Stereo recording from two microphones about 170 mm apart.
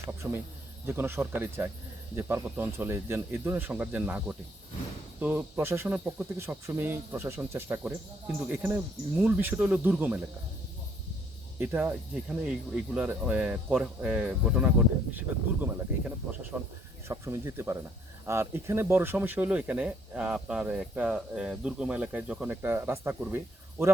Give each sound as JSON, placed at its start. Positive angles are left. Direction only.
{"t": 0.2, "sound": "speech", "side_deg": -15}
{"t": 11.6, "sound": "speech", "side_deg": -10}
{"t": 16.5, "sound": "speech", "side_deg": -15}